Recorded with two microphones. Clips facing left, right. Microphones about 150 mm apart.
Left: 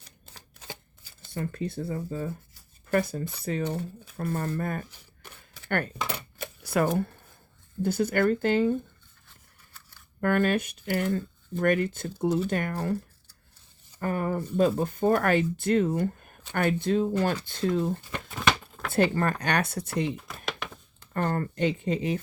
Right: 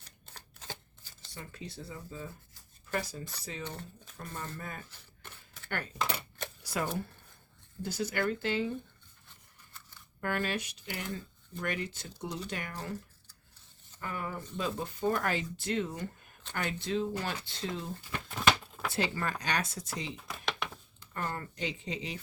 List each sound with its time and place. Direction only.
1.2 s speech: 55° left (ahead or behind)
4.9 s a sound: 15° left (ahead or behind)
5.6 s speech: 60° left (ahead or behind)
6.0 s coin: centre (ahead or behind)
6.6 s speech: 60° left (ahead or behind)
10.2 s speech: 55° left (ahead or behind)
18.3 s a sound: centre (ahead or behind)
18.9 s speech: 55° left (ahead or behind)
20.1 s a sound: centre (ahead or behind)
21.0 s speech: 55° left (ahead or behind)